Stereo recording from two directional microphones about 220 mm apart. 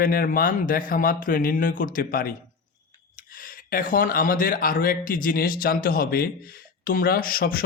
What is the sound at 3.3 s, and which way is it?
Speech, 40° left (ahead or behind).